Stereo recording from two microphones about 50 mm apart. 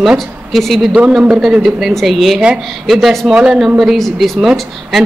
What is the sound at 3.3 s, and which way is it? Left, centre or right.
Speech, right.